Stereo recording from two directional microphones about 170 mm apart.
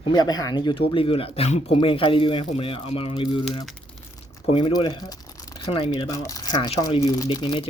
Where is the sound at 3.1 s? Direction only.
25° left (ahead or behind).